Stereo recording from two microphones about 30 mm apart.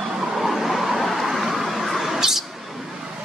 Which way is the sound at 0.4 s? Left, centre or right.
Centre.